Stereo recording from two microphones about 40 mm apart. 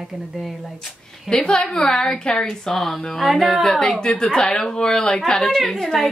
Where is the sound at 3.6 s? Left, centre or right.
Centre.